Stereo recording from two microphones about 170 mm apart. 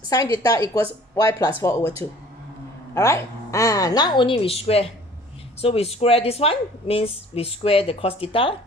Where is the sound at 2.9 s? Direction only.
15° left (ahead or behind).